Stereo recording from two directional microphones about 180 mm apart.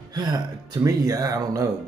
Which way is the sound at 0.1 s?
25° right (ahead or behind).